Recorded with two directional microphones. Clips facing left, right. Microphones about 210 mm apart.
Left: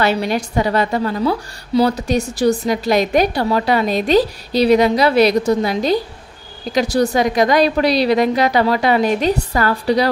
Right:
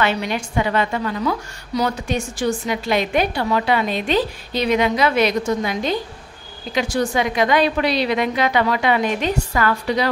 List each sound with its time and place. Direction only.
0.0 s a woman's voice: 40° left (ahead or behind)